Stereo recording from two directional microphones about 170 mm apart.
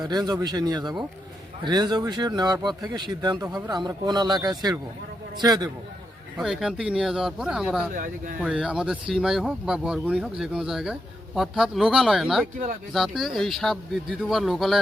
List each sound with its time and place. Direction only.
0.0 s speech: 25° right (ahead or behind)
6.3 s speech: centre (ahead or behind)
7.9 s speech: 50° right (ahead or behind)
8.4 s speech: 5° right (ahead or behind)